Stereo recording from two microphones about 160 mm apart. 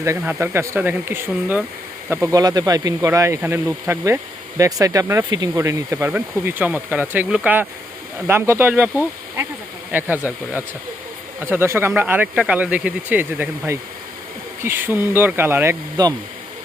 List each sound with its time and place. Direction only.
0.0 s speech: 15° right (ahead or behind)